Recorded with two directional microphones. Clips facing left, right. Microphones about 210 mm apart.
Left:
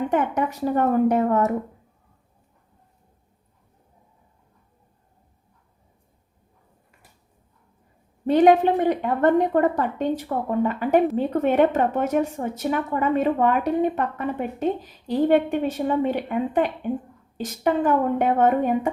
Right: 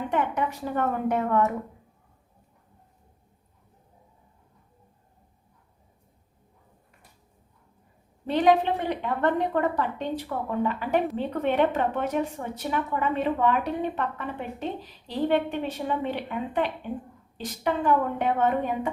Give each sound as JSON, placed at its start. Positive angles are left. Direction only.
{"t": 0.1, "sound": "a woman's voice", "side_deg": 45}
{"t": 8.3, "sound": "a woman's voice", "side_deg": 45}